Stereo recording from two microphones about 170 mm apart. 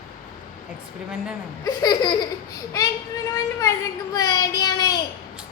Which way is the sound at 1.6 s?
25° left (ahead or behind).